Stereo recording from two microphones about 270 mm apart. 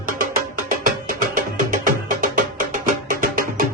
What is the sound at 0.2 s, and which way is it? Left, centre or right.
Music, right.